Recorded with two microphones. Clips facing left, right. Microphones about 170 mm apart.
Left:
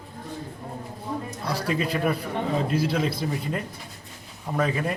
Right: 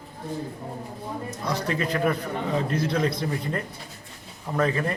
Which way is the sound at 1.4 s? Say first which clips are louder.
Even; 10° left (ahead or behind).